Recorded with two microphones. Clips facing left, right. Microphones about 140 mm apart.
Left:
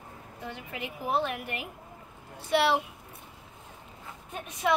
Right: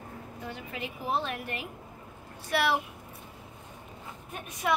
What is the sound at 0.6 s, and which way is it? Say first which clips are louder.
A woman's voice: even; 15° left (ahead or behind).